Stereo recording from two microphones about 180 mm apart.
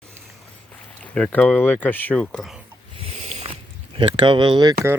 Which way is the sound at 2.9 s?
35° right (ahead or behind).